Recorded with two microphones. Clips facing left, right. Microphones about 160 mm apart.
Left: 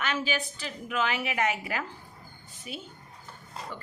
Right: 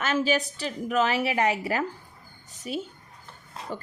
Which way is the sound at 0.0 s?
40° right (ahead or behind).